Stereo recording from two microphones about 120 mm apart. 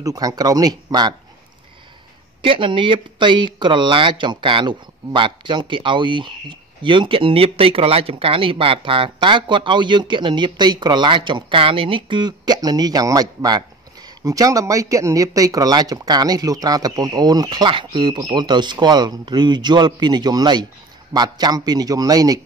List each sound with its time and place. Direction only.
0.0 s speech: 30° right (ahead or behind)
2.4 s speech: 45° right (ahead or behind)